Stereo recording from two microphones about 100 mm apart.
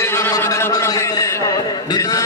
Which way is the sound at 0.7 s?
30° left (ahead or behind).